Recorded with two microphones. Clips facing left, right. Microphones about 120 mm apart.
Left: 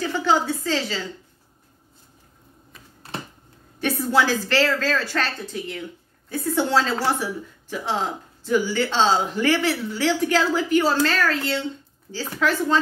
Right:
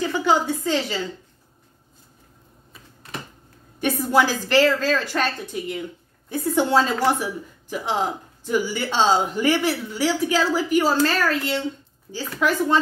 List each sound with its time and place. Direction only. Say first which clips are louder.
0.2 s a woman's voice: even; 15° right (ahead or behind)
3.8 s speech: right 1 dB; 15° right (ahead or behind)